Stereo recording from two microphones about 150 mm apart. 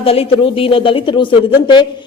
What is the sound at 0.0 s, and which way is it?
Speech, 40° left (ahead or behind).